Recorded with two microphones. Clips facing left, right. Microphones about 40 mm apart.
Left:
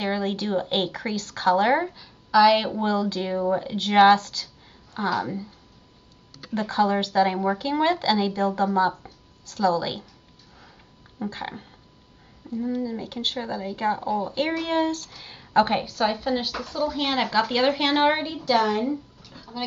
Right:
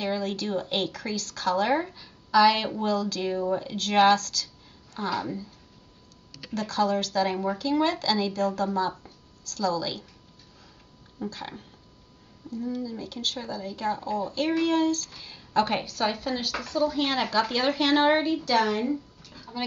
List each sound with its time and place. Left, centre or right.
0.0 s speech: left
2.0 s speech: centre; by 5.5 s left
6.5 s speech: left
11.1 s speech: left
15.8 s a woman's voice: centre